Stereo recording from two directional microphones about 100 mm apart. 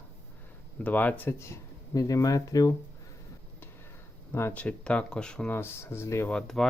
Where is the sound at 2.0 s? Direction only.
35° left (ahead or behind).